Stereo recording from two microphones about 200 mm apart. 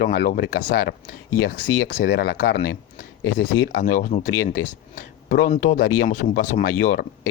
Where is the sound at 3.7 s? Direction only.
45° left (ahead or behind).